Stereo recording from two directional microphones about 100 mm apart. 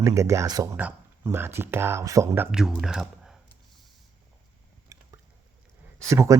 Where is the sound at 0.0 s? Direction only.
30° right (ahead or behind).